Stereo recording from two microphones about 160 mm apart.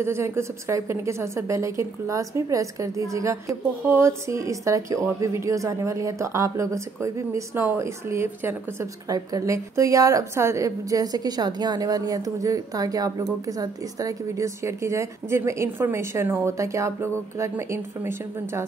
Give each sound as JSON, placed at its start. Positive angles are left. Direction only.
{"t": 0.0, "sound": "a woman's voice", "side_deg": -15}